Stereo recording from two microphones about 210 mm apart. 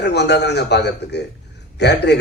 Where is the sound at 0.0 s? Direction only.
55° left (ahead or behind).